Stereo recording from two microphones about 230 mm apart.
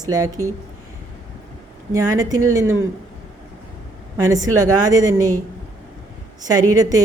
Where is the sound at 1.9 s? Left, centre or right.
Centre.